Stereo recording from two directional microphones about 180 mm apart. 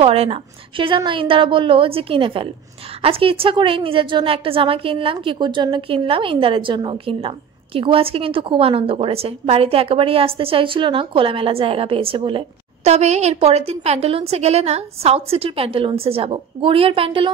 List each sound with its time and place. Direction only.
0.0 s a woman's voice: 35° right (ahead or behind)